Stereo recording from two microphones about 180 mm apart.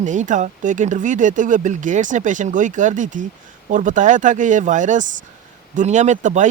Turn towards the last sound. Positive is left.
turn(degrees=-40)  # may be behind; listen again after turning